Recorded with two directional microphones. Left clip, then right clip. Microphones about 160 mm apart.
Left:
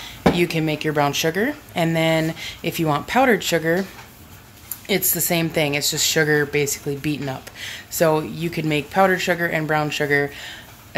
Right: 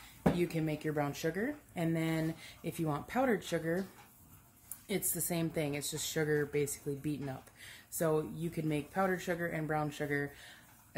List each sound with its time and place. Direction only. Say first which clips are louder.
0.4 s speech: left 14 dB; 10° right (ahead or behind)
4.8 s speech: left 16 dB; 10° right (ahead or behind)